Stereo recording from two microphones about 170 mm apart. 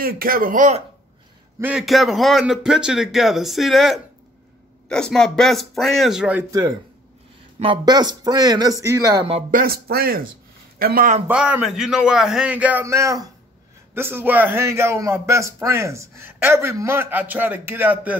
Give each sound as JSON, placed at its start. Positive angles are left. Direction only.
{"t": 0.0, "sound": "speech", "side_deg": -60}
{"t": 1.6, "sound": "a man's voice", "side_deg": -5}
{"t": 7.5, "sound": "a man's voice", "side_deg": -30}
{"t": 9.5, "sound": "speech", "side_deg": -60}
{"t": 11.2, "sound": "a man's voice", "side_deg": -10}